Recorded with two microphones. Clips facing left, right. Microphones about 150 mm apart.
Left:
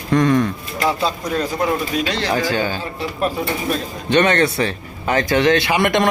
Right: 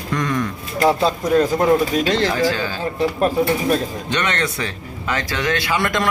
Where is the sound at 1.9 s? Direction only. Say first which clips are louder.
Right 2 dB; 40° right (ahead or behind).